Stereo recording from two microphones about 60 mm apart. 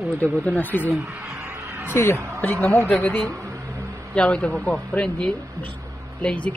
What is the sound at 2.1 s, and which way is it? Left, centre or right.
Speech, right.